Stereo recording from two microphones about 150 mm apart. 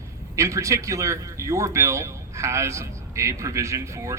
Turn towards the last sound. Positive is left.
turn(degrees=-20)  # may be behind; listen again after turning